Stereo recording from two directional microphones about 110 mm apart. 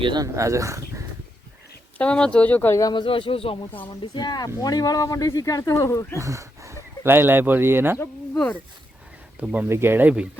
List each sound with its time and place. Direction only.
0.0 s speech: 45° right (ahead or behind)
0.3 s speech: 30° right (ahead or behind)
2.0 s speech: 10° left (ahead or behind)
2.9 s speech: 50° left (ahead or behind)
4.0 s speech: 45° left (ahead or behind); by 6.1 s 30° left (ahead or behind)
6.1 s speech: 30° right (ahead or behind)
9.4 s speech: 15° right (ahead or behind)